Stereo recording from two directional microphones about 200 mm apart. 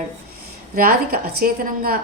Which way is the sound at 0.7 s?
45° right (ahead or behind).